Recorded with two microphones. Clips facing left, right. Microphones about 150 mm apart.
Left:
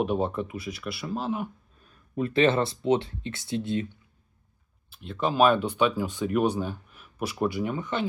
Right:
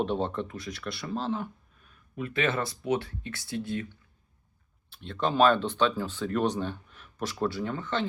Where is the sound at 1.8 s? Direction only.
35° left (ahead or behind).